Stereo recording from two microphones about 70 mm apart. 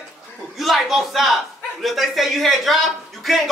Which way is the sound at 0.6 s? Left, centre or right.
Centre.